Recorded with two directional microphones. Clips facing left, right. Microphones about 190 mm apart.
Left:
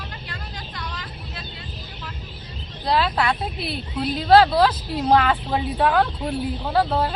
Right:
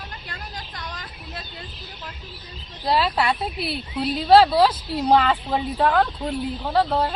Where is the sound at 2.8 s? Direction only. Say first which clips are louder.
Even; 5° right (ahead or behind).